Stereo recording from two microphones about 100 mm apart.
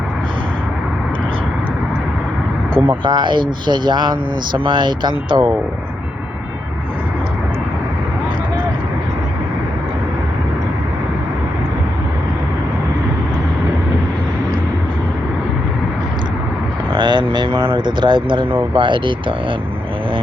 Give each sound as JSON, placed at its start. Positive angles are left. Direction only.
{"t": 2.8, "sound": "speech", "side_deg": -55}
{"t": 16.9, "sound": "vehicle", "side_deg": -55}
{"t": 17.7, "sound": "speech", "side_deg": -55}